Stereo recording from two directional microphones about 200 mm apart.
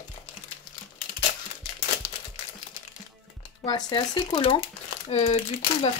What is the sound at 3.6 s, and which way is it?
Speech, 20° left (ahead or behind).